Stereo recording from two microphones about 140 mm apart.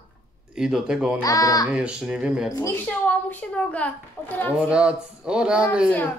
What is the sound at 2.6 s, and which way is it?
A woman's voice, 15° left (ahead or behind).